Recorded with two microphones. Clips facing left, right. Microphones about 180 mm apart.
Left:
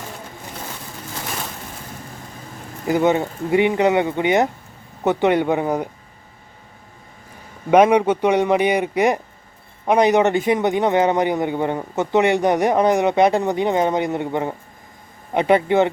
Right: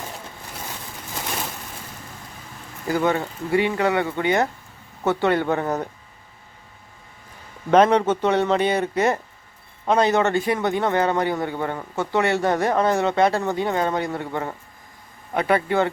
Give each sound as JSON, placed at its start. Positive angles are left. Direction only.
{"t": 2.8, "sound": "a man's voice", "side_deg": 20}
{"t": 7.7, "sound": "a man's voice", "side_deg": 10}